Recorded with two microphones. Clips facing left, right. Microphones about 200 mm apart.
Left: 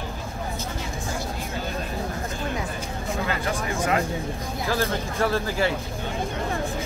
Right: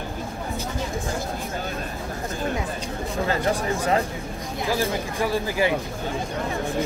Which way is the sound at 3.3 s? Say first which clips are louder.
Right 7 dB; 35° right (ahead or behind).